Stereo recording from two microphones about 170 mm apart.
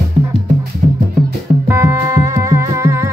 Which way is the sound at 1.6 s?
15° right (ahead or behind).